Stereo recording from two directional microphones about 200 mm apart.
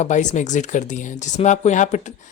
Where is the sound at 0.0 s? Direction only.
35° left (ahead or behind).